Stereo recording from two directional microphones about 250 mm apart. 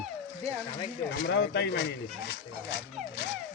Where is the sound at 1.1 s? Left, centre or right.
Left.